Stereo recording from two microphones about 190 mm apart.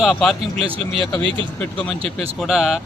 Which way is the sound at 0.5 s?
30° right (ahead or behind).